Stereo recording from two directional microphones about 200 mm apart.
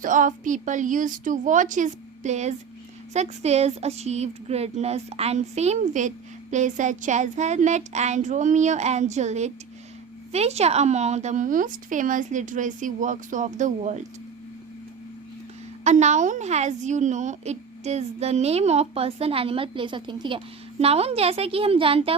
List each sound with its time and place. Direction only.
0.0 s speech: 40° right (ahead or behind)
15.8 s speech: 35° right (ahead or behind)